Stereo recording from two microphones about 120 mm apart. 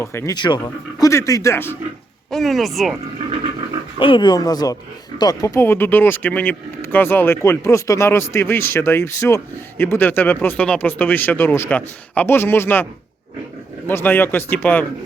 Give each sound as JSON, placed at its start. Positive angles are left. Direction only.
{"t": 0.0, "sound": "speech", "side_deg": 20}
{"t": 0.3, "sound": "speech", "side_deg": 40}
{"t": 2.3, "sound": "speech", "side_deg": 0}
{"t": 3.9, "sound": "speech", "side_deg": 45}
{"t": 5.6, "sound": "speech", "side_deg": 15}